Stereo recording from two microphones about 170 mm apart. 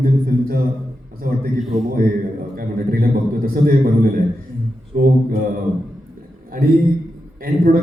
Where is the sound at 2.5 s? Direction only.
60° right (ahead or behind).